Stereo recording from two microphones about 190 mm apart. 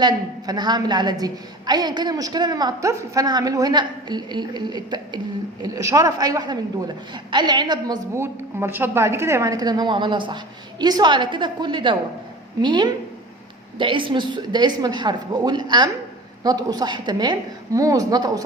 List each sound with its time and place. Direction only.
0.0 s a woman's voice: 20° right (ahead or behind)